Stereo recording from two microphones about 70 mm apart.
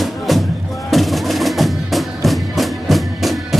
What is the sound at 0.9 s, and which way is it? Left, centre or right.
Music, centre.